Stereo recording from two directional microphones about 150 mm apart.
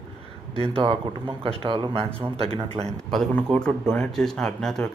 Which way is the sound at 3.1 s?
5° left (ahead or behind).